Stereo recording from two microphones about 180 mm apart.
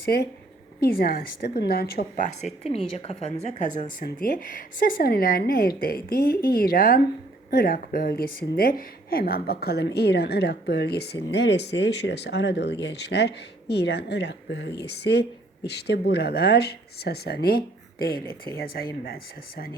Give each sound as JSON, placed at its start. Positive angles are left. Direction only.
{"t": 0.1, "sound": "a woman's voice", "side_deg": 60}
{"t": 2.6, "sound": "a woman's voice", "side_deg": 35}
{"t": 4.0, "sound": "a woman's voice", "side_deg": 50}